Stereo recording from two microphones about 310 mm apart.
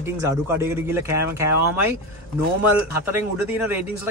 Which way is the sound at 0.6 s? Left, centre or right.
Centre.